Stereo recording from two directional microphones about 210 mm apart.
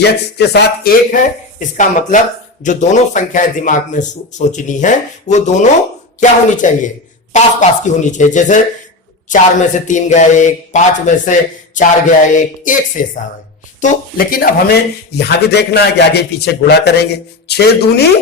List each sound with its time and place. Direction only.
0.0 s speech: 50° left (ahead or behind)